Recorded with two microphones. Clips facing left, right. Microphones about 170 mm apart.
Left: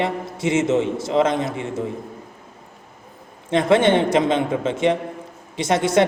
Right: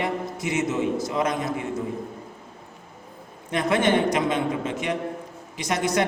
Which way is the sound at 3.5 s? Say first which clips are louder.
Left 5 dB; 25° left (ahead or behind).